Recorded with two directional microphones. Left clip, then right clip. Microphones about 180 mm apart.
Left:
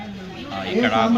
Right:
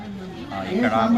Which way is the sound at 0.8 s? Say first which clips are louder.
Left 1 dB; centre (ahead or behind).